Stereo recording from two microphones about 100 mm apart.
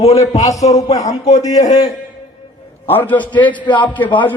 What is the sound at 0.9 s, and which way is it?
Speech, 35° left (ahead or behind).